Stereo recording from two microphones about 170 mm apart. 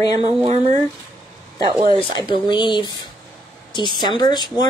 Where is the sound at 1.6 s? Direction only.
30° right (ahead or behind).